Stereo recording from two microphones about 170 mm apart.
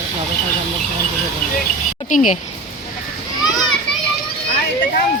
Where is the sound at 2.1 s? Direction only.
50° left (ahead or behind).